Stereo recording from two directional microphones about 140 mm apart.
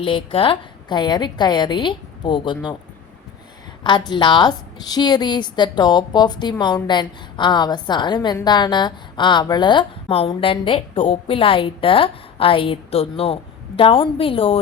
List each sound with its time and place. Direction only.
0.0 s a woman's voice: 40° left (ahead or behind)
3.8 s a woman's voice: 35° left (ahead or behind)